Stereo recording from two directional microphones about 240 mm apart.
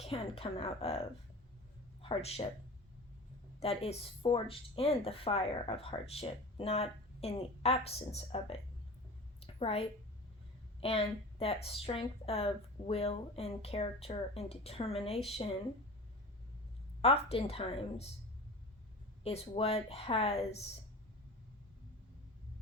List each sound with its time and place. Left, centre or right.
0.0 s speech: left
3.6 s speech: left
9.4 s a sound: left
10.8 s speech: left
17.0 s speech: left
19.2 s speech: left